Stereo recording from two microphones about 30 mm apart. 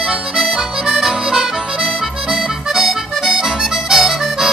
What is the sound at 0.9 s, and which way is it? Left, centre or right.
Music, centre.